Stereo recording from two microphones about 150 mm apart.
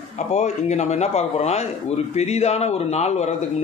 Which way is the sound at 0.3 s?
50° left (ahead or behind).